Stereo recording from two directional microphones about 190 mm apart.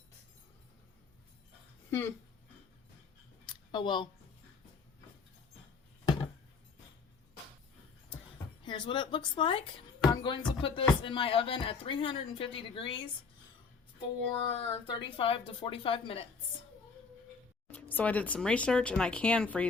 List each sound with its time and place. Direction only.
1.9 s speech: 15° left (ahead or behind)
3.4 s a sound: 25° left (ahead or behind)
8.6 s speech: 25° left (ahead or behind)
14.5 s speech: 25° left (ahead or behind)
17.7 s speech: 10° left (ahead or behind)